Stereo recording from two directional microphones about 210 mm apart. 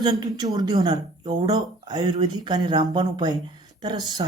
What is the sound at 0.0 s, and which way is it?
Speech, 20° right (ahead or behind).